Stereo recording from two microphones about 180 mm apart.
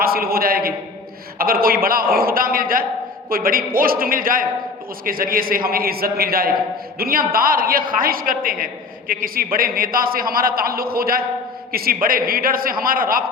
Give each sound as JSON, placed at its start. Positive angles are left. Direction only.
{"t": 0.0, "sound": "a man's voice", "side_deg": -55}